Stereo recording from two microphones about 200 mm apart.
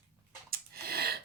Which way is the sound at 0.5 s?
50° right (ahead or behind).